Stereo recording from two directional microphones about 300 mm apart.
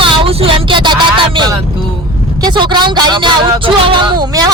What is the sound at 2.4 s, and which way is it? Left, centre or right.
Speech, centre.